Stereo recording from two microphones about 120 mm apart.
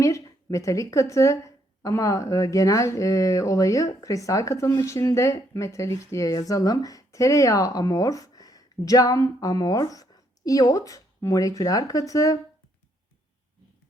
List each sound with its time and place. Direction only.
0.0 s speech: 25° left (ahead or behind)